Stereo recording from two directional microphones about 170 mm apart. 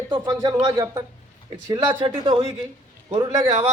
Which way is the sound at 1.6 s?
30° right (ahead or behind).